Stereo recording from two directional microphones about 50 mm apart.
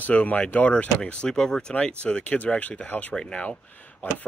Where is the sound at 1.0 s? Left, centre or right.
Centre.